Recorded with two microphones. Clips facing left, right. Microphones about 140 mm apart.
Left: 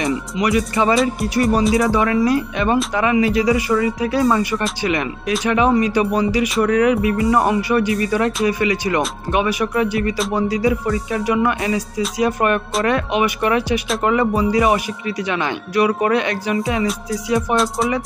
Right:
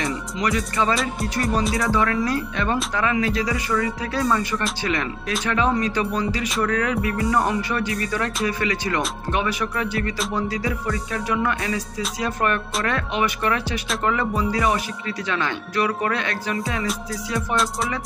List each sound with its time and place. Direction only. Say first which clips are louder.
0.0 s speech: left 5 dB; 10° left (ahead or behind)